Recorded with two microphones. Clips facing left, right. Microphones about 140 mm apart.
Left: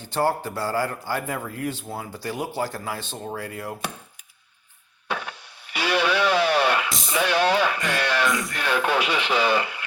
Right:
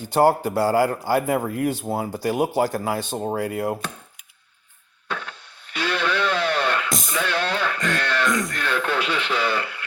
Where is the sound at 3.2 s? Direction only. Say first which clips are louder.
Right 7 dB; 40° right (ahead or behind).